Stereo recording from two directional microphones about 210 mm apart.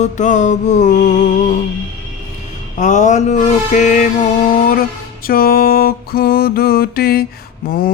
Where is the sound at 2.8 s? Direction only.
35° left (ahead or behind).